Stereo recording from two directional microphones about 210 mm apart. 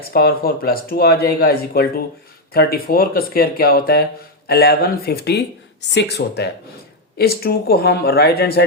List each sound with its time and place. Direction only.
0.0 s speech: 45° left (ahead or behind)